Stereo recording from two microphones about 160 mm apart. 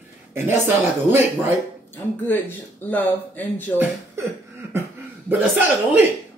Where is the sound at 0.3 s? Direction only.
15° right (ahead or behind).